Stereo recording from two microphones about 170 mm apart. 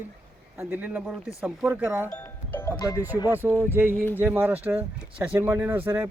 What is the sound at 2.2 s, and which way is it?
Music, 10° left (ahead or behind).